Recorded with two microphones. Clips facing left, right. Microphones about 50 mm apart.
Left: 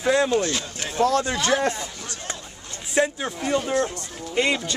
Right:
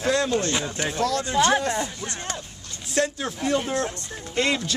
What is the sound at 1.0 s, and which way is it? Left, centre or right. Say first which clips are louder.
Speech: left 6 dB; left.